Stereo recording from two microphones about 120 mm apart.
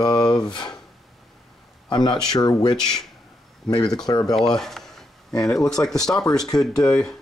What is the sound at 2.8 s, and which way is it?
Speech, 5° left (ahead or behind).